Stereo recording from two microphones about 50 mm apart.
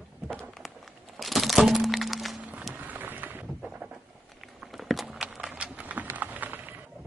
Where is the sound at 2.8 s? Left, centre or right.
Right.